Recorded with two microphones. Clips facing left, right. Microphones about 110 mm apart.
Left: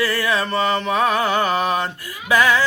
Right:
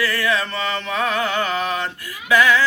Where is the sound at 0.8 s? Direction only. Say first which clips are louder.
Left 4 dB; 20° left (ahead or behind).